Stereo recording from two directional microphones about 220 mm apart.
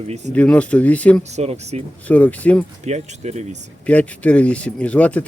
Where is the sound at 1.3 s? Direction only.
30° right (ahead or behind).